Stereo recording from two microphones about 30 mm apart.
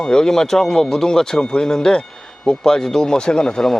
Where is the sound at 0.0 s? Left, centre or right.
Left.